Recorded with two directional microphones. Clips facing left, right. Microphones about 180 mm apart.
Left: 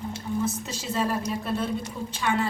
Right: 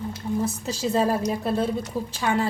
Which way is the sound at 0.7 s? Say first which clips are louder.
Right 5 dB; 35° right (ahead or behind).